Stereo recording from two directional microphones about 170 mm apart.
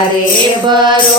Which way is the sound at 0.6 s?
25° right (ahead or behind).